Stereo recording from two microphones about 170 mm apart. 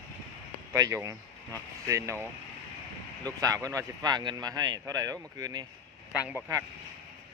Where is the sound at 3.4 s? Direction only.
20° right (ahead or behind).